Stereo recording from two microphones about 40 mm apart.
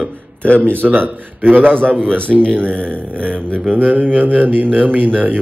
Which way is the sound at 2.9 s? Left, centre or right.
Right.